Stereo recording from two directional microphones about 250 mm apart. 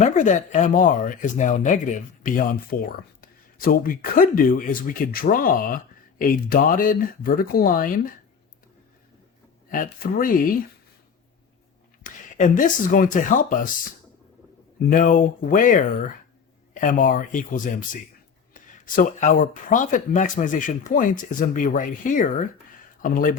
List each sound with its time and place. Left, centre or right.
0.0 s speech: left
9.6 s speech: left
12.0 s speech: left
14.8 s speech: left